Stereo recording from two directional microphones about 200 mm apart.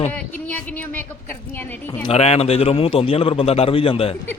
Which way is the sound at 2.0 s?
30° left (ahead or behind).